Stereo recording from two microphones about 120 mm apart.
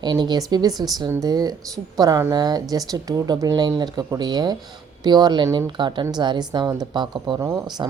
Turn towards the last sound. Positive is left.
turn(degrees=-35)  # may be behind; listen again after turning